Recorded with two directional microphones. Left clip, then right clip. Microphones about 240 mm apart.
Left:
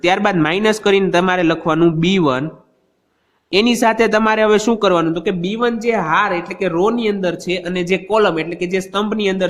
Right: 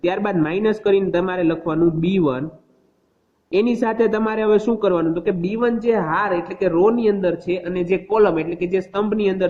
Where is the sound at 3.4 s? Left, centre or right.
Left.